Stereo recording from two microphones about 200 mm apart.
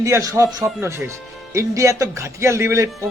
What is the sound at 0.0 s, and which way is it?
Speech, 15° right (ahead or behind).